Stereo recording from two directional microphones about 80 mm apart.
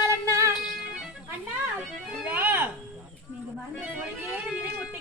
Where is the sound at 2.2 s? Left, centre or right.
Right.